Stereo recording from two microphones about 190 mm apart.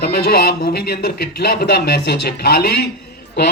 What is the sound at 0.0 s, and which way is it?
Speech, 55° left (ahead or behind).